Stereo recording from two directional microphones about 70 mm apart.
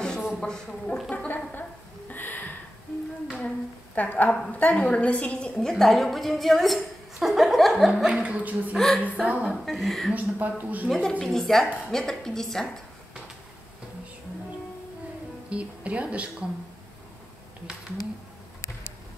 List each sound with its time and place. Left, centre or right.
0.4 s speech: centre
1.1 s a sound: left
4.5 s a woman's voice: left; by 8.1 s centre
8.1 s speech: centre
8.7 s speech: centre
9.2 s speech: centre
9.7 s a woman's voice: centre
10.1 s speech: right
10.9 s a woman's voice: centre
15.5 s speech: centre